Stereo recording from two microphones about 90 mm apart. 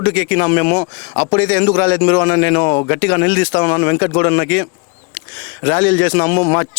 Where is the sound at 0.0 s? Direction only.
20° left (ahead or behind).